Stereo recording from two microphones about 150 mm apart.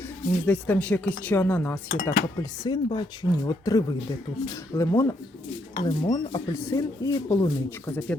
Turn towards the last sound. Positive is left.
turn(degrees=25)  # may be behind; listen again after turning